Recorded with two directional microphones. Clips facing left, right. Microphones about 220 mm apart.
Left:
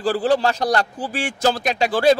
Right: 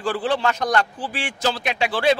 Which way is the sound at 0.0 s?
40° left (ahead or behind).